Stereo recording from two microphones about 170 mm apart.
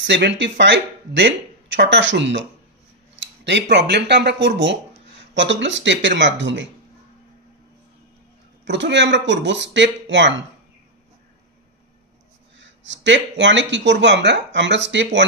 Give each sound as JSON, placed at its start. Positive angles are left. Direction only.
{"t": 0.0, "sound": "speech", "side_deg": -90}
{"t": 3.2, "sound": "a sound", "side_deg": -90}
{"t": 3.7, "sound": "speech", "side_deg": -80}
{"t": 8.6, "sound": "speech", "side_deg": -90}
{"t": 12.5, "sound": "speech", "side_deg": -90}